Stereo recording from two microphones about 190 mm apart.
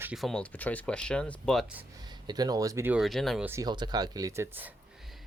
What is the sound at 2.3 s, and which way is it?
Speech, 20° right (ahead or behind).